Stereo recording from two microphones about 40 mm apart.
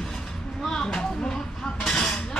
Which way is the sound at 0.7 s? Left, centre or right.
Centre.